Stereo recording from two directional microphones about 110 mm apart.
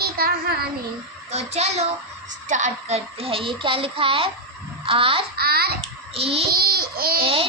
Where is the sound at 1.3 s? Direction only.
75° right (ahead or behind).